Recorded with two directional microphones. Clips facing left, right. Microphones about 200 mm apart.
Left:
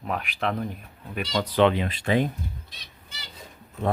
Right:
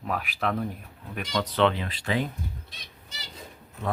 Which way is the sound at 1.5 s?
15° left (ahead or behind).